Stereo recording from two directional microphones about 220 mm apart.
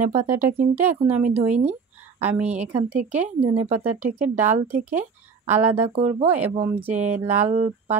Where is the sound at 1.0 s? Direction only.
30° right (ahead or behind).